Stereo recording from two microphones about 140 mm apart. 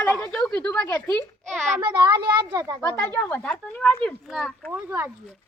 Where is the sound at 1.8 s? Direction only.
30° right (ahead or behind).